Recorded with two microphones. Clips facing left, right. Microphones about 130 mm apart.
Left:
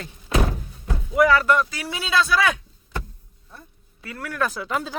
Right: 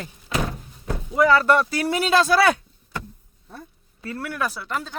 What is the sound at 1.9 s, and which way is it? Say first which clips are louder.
Speech: right 4 dB; 45° right (ahead or behind).